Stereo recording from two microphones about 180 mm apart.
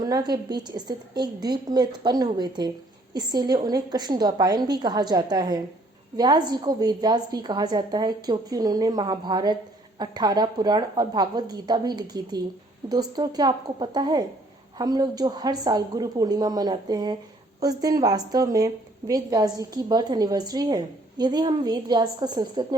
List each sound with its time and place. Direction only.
0.0 s a woman's voice: 20° right (ahead or behind)